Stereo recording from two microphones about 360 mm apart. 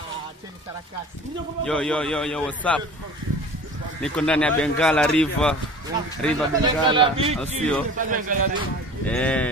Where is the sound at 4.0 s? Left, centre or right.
Centre.